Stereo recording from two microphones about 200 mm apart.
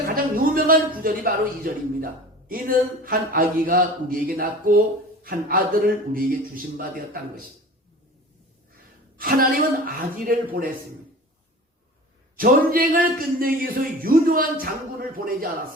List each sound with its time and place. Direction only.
0.3 s speech: 45° right (ahead or behind)
9.1 s speech: 45° right (ahead or behind)
12.4 s speech: 45° right (ahead or behind)